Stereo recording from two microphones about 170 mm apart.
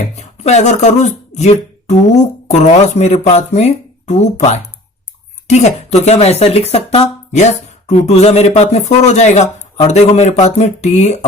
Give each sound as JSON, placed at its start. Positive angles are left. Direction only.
{"t": 0.2, "sound": "speech", "side_deg": 40}